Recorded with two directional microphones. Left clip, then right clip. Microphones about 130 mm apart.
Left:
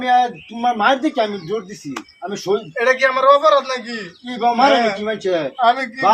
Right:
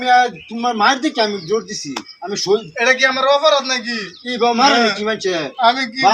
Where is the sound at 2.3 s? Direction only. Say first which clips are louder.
Right 3 dB; 20° left (ahead or behind).